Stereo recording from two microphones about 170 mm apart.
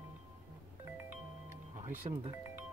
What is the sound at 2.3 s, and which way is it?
Music, 15° right (ahead or behind).